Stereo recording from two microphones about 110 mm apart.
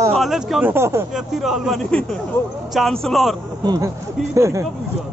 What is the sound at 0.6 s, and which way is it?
Speech, 20° right (ahead or behind).